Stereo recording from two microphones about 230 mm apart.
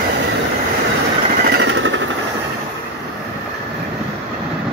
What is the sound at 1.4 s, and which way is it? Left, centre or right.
Jackhammer, right.